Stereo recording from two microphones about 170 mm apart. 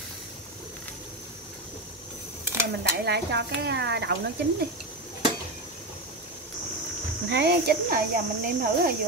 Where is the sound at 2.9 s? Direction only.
80° right.